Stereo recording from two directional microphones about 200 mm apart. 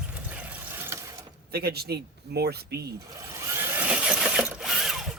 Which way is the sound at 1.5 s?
50° right (ahead or behind).